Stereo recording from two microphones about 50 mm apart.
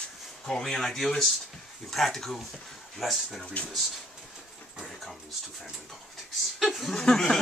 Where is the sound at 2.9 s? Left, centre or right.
Centre.